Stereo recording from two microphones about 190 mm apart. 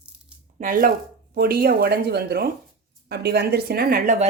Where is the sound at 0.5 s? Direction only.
45° right (ahead or behind).